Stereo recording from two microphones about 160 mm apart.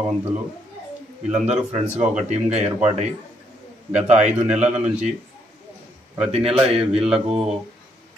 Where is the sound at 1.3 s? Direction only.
5° right (ahead or behind).